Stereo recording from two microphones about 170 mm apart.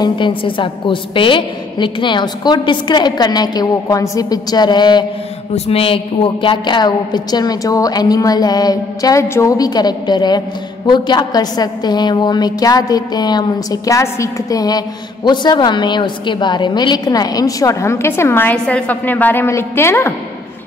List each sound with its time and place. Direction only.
0.0 s a woman's voice: 30° left (ahead or behind); by 20.2 s 15° left (ahead or behind)